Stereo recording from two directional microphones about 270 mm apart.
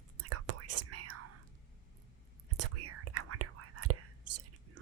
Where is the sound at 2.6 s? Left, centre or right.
Right.